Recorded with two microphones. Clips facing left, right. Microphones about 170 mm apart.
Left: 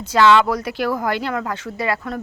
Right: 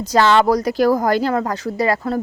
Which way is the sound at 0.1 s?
40° right (ahead or behind).